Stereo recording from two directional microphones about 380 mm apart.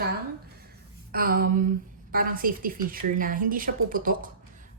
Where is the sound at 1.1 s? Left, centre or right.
Right.